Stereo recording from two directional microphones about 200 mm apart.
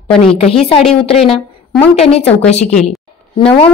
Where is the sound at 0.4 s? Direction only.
30° left (ahead or behind).